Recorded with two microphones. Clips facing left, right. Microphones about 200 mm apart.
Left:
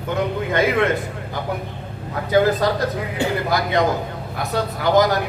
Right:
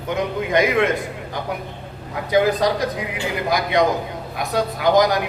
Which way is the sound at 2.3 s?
15° right (ahead or behind).